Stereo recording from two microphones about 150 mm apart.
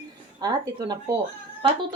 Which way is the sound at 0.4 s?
25° right (ahead or behind).